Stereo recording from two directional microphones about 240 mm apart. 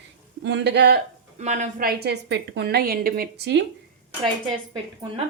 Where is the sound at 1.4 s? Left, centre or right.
Right.